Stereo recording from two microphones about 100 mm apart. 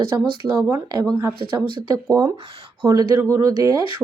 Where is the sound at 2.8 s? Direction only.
40° right (ahead or behind).